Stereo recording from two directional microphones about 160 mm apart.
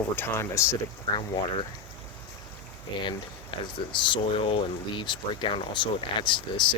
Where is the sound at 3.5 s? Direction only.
35° left (ahead or behind).